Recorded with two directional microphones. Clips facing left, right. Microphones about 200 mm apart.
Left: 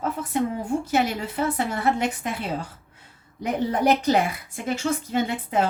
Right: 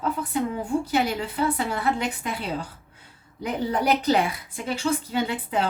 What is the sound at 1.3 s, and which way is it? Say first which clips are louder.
A woman's voice: even; 45° left (ahead or behind).